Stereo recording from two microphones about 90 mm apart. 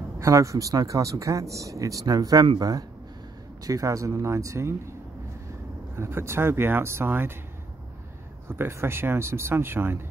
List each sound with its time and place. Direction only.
0.2 s speech: 35° right (ahead or behind)
3.6 s speech: 40° right (ahead or behind)
5.9 s speech: 30° right (ahead or behind)
8.5 s speech: 25° right (ahead or behind)